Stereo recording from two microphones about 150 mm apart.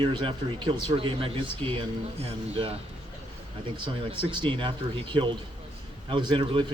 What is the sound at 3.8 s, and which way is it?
Speech, 30° right (ahead or behind).